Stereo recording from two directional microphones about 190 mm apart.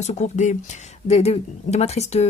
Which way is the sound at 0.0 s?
35° left (ahead or behind).